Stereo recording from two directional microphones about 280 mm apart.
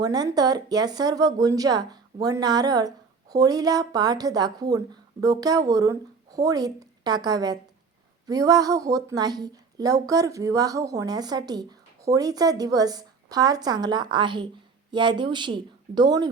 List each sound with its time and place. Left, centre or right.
0.0 s speech: centre